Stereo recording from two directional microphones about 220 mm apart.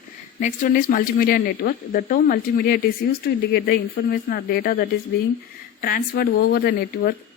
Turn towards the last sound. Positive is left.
turn(degrees=45)  # may be behind; listen again after turning